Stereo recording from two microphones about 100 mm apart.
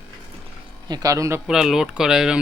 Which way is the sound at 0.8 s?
40° right (ahead or behind).